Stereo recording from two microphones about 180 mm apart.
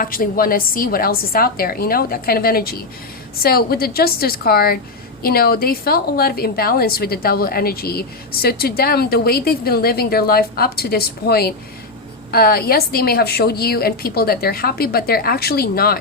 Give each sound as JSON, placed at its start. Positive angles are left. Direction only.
{"t": 0.0, "sound": "a woman's voice", "side_deg": 50}